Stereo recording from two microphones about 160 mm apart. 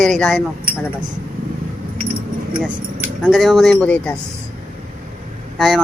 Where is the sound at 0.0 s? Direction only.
Centre (ahead or behind).